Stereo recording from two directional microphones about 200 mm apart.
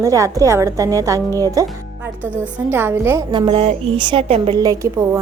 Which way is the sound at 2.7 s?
10° right (ahead or behind).